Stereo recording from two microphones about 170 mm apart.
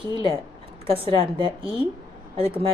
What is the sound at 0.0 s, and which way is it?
A woman's voice, 30° right (ahead or behind).